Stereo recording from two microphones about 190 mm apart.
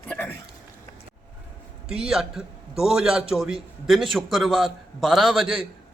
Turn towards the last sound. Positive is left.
turn(degrees=0)  # may be behind; listen again after turning